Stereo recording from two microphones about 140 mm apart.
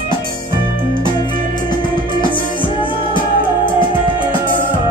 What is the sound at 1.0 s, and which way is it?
Music, 30° left (ahead or behind).